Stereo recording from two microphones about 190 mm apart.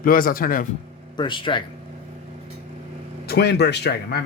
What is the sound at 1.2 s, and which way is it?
Speech, 25° left (ahead or behind).